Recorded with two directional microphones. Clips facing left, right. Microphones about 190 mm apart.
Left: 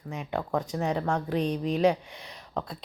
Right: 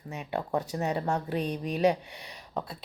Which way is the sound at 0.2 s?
10° right (ahead or behind).